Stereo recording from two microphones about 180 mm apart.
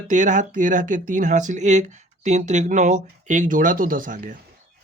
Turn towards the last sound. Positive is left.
turn(degrees=-50)  # may be behind; listen again after turning